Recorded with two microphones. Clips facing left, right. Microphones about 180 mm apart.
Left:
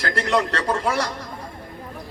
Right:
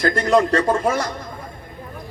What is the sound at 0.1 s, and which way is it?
Speech, 20° right (ahead or behind).